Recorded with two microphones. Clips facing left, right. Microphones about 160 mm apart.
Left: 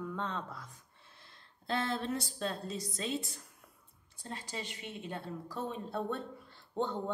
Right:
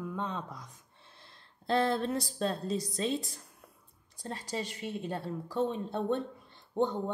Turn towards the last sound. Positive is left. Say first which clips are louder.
# right 5 dB
turn(degrees=-15)  # may be behind; listen again after turning